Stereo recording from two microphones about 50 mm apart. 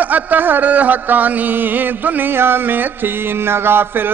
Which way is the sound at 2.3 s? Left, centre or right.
Right.